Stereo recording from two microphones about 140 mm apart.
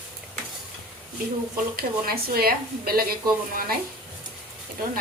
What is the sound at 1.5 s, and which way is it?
Speech, 90° right.